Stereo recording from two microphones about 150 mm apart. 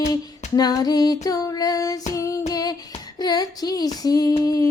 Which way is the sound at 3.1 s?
25° left (ahead or behind).